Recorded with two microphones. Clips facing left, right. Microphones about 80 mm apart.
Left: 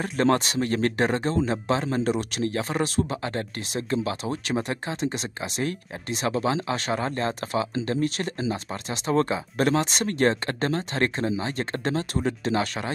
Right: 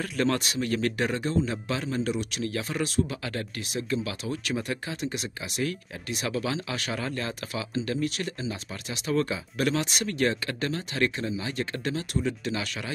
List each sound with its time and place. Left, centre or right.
0.0 s speech: left